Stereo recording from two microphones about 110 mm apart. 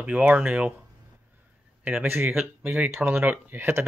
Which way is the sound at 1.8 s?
15° right (ahead or behind).